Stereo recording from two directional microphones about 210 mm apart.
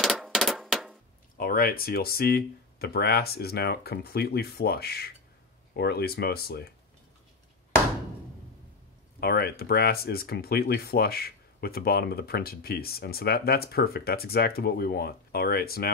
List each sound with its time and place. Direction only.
0.0 s a sound: centre (ahead or behind)
1.4 s speech: 45° left (ahead or behind)
9.2 s speech: 50° left (ahead or behind)